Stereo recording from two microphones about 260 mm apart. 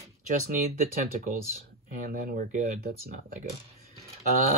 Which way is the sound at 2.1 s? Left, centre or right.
Right.